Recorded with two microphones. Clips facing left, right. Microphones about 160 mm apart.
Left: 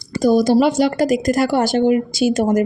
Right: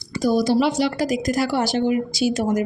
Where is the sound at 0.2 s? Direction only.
50° left (ahead or behind).